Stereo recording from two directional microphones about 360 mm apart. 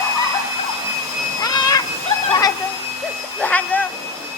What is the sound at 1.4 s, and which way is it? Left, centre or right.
Cat, centre.